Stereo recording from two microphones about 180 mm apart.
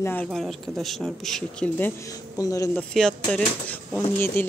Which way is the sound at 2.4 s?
20° left (ahead or behind).